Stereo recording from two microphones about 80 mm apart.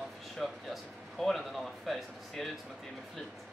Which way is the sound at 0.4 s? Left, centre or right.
Centre.